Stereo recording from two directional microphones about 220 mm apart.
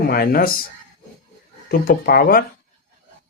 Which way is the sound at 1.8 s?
40° left (ahead or behind).